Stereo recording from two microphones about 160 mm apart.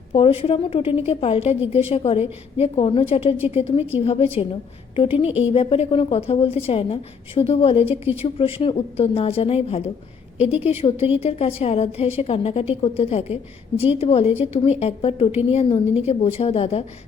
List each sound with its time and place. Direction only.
0.1 s a woman's voice: 35° left (ahead or behind)
7.9 s a woman's voice: 10° right (ahead or behind)
8.2 s a woman's voice: 35° left (ahead or behind)